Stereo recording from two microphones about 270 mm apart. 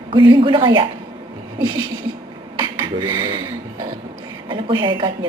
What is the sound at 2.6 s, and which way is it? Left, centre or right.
A woman's voice, centre.